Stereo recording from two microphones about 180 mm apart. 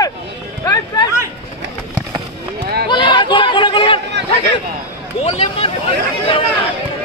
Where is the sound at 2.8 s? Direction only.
25° left (ahead or behind).